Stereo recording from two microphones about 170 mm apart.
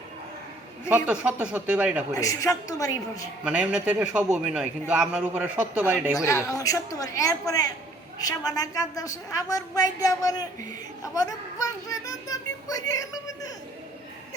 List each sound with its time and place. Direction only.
0.9 s a man's voice: 10° right (ahead or behind)
2.1 s speech: 20° left (ahead or behind)
3.4 s a man's voice: 5° right (ahead or behind)
6.1 s speech: 20° left (ahead or behind)